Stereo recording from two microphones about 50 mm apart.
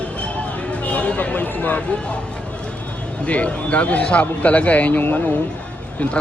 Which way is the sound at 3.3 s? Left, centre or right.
Left.